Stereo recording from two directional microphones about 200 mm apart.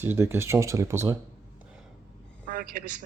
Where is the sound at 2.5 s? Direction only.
45° right (ahead or behind).